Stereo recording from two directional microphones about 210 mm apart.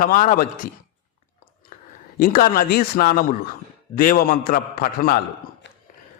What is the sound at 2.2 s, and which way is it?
Speech, 45° left (ahead or behind).